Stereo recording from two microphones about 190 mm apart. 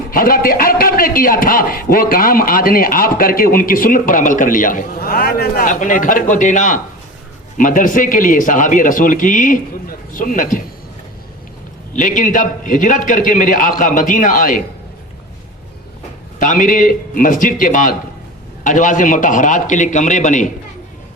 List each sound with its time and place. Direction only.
0.1 s a man's voice: 50° left (ahead or behind)
11.9 s a man's voice: 45° left (ahead or behind)
16.4 s a man's voice: 45° left (ahead or behind)